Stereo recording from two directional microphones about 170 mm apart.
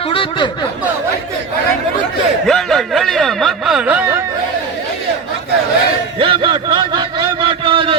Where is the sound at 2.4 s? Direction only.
Centre (ahead or behind).